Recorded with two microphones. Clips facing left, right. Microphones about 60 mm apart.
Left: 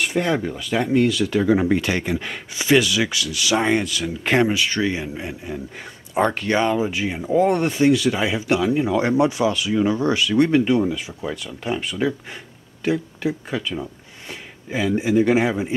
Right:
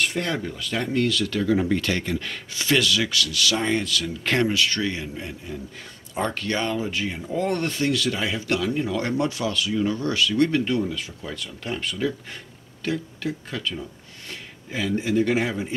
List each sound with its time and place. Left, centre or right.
0.0 s speech: centre